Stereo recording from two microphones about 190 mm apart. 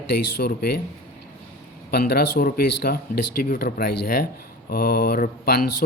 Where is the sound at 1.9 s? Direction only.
55° left (ahead or behind).